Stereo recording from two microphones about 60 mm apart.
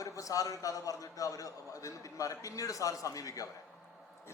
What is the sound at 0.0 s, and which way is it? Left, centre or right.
A man's voice, left.